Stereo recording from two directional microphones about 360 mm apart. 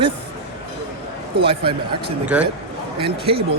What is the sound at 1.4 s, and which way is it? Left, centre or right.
Speech, centre.